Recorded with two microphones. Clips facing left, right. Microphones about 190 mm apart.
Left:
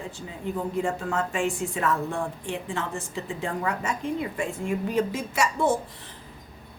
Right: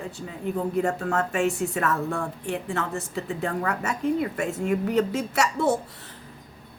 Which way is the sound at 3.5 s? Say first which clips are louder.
Right 1 dB; 65° right (ahead or behind).